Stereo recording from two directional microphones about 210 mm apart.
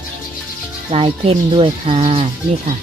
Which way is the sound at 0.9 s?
25° right (ahead or behind).